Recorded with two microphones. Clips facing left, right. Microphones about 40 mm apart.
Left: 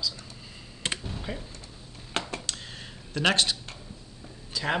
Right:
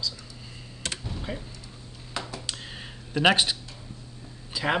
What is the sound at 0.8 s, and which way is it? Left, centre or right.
Computer keyboard, left.